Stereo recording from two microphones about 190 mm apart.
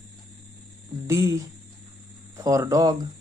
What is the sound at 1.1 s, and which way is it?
Speech, 15° right (ahead or behind).